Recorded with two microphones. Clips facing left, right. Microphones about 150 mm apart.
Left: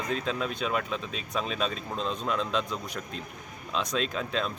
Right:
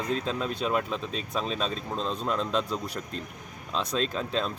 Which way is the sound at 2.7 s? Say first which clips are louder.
Right 3 dB; 35° right (ahead or behind).